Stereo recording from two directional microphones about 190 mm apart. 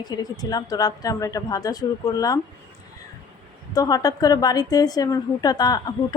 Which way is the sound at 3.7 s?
20° left (ahead or behind).